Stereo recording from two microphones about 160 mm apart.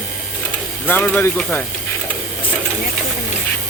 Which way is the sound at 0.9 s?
10° left (ahead or behind).